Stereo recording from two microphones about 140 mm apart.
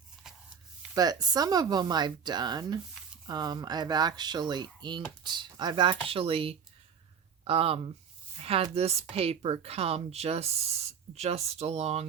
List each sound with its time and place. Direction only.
0.9 s speech: 25° right (ahead or behind); by 7.8 s 45° right (ahead or behind)
8.4 s a sound: 45° right (ahead or behind)
8.7 s speech: 45° right (ahead or behind)